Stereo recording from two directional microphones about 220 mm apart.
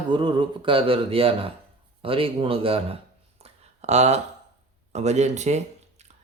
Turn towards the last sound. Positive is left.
turn(degrees=-30)  # may be behind; listen again after turning